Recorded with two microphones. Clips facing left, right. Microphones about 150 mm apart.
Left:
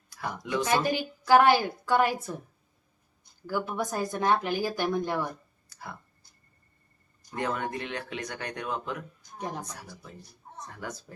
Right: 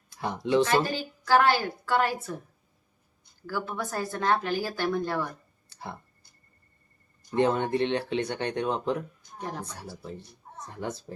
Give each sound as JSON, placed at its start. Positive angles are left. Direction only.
{"t": 0.1, "sound": "speech", "side_deg": -25}
{"t": 0.6, "sound": "speech", "side_deg": 15}
{"t": 3.4, "sound": "speech", "side_deg": 15}
{"t": 5.6, "sound": "a sound", "side_deg": -30}
{"t": 7.3, "sound": "speech", "side_deg": -25}
{"t": 9.4, "sound": "speech", "side_deg": 15}
{"t": 10.0, "sound": "speech", "side_deg": -30}